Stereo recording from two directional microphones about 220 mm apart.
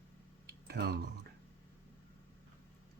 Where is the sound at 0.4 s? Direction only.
45° right (ahead or behind).